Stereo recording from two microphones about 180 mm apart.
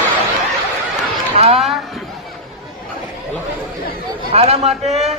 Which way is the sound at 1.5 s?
Centre (ahead or behind).